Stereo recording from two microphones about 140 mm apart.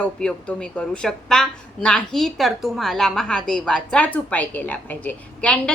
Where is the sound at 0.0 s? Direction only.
10° left (ahead or behind).